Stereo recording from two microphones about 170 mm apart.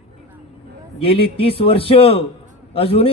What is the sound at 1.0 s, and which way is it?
A man's voice, 35° left (ahead or behind).